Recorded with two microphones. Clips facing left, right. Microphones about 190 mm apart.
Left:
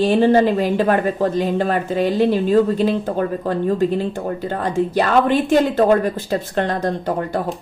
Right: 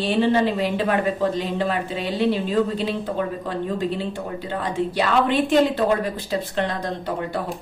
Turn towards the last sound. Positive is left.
turn(degrees=45)  # may be behind; listen again after turning